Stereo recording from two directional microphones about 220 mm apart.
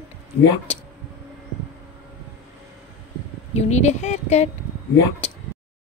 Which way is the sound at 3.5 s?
30° left (ahead or behind).